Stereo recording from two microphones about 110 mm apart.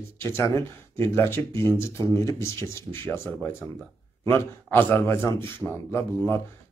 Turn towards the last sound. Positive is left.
turn(degrees=20)  # may be behind; listen again after turning